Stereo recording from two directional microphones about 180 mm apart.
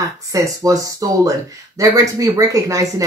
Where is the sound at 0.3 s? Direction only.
15° right (ahead or behind).